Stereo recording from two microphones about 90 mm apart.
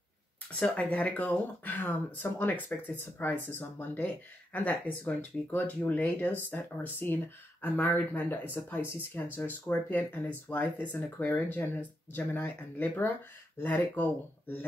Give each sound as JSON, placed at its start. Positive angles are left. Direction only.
{"t": 0.6, "sound": "speech", "side_deg": 15}